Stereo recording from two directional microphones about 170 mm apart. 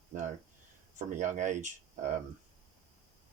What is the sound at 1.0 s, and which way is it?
Speech, 50° right (ahead or behind).